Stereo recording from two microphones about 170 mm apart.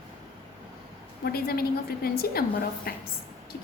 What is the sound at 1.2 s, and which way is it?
A woman's voice, 65° left (ahead or behind).